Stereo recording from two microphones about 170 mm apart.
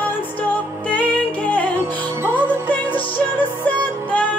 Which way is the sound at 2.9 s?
30° left (ahead or behind).